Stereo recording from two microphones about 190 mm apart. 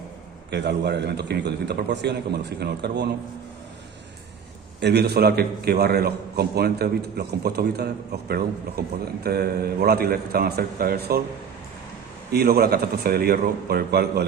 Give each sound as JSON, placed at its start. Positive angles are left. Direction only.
{"t": 0.5, "sound": "a man's voice", "side_deg": -65}
{"t": 4.8, "sound": "a man's voice", "side_deg": -60}
{"t": 12.3, "sound": "a man's voice", "side_deg": -55}